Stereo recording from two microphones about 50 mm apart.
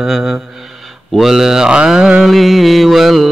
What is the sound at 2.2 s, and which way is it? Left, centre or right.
Mantra, centre.